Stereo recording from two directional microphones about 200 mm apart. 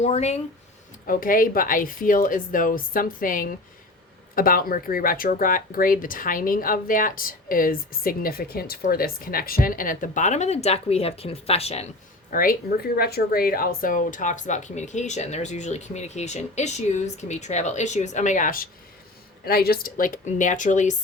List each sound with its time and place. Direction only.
0.0 s speech: 35° left (ahead or behind)
1.0 s speech: 45° left (ahead or behind)
12.3 s speech: 45° left (ahead or behind)